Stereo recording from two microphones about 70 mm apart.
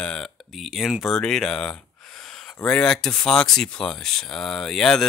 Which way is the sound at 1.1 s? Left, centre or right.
Centre.